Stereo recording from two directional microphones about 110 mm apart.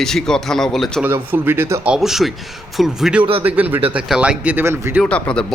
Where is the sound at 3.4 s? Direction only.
15° right (ahead or behind).